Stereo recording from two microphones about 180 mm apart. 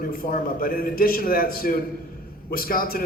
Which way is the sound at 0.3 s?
55° left (ahead or behind).